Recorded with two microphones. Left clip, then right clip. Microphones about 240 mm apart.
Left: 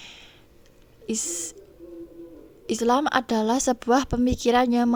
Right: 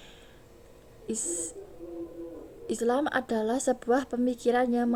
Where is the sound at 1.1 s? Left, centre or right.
Left.